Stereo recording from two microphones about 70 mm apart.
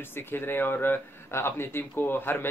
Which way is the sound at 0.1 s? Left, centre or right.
Left.